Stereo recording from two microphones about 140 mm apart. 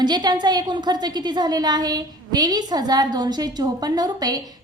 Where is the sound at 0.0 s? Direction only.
30° right (ahead or behind).